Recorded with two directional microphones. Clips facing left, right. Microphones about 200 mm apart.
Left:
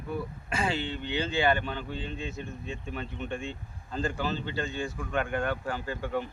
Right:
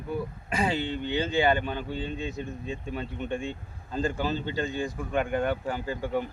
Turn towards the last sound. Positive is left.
turn(degrees=-15)  # may be behind; listen again after turning